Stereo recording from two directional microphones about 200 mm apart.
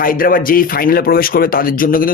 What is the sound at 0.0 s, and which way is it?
A man's voice, 45° left (ahead or behind).